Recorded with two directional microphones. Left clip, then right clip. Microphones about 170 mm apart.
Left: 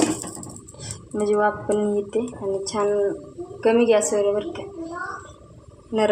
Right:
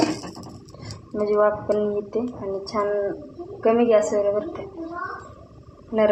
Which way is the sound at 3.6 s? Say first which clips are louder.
Even; 25° left (ahead or behind).